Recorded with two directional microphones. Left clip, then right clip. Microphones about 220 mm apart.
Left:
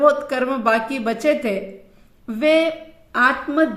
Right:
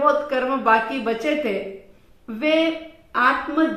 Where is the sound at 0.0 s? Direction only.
50° left (ahead or behind).